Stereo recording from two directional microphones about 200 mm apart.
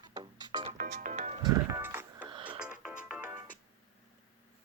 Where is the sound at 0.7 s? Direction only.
40° right (ahead or behind).